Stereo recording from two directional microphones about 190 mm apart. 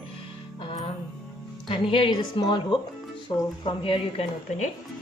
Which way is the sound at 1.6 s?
30° left (ahead or behind).